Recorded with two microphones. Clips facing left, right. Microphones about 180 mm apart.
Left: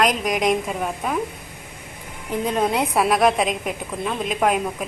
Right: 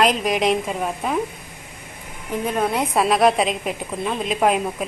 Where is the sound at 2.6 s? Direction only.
15° left (ahead or behind).